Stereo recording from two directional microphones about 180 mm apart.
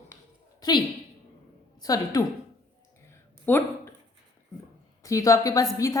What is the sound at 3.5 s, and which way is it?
Speech, 10° left (ahead or behind).